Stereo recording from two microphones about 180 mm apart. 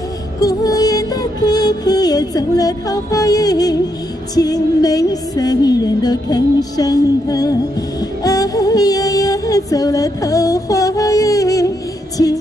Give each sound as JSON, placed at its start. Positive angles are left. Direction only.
{"t": 0.4, "sound": "music", "side_deg": 20}